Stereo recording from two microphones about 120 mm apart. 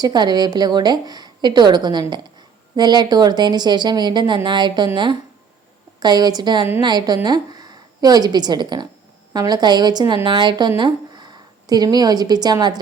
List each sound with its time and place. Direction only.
0.0 s a woman's voice: 35° right (ahead or behind)
6.0 s a woman's voice: 35° right (ahead or behind)